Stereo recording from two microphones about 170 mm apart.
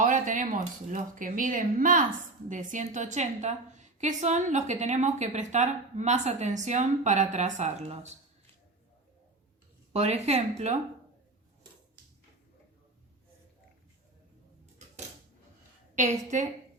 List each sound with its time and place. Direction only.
0.0 s a woman's voice: 50° right (ahead or behind)
9.9 s speech: 40° right (ahead or behind)
16.0 s a woman's voice: 45° right (ahead or behind)